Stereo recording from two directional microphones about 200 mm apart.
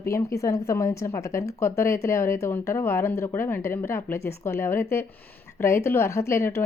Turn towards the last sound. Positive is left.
turn(degrees=15)  # may be behind; listen again after turning